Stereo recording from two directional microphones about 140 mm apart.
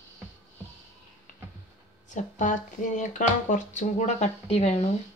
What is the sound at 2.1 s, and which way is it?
Speech, 65° left (ahead or behind).